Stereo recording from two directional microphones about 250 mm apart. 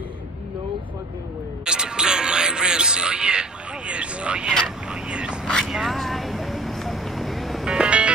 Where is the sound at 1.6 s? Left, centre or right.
Centre.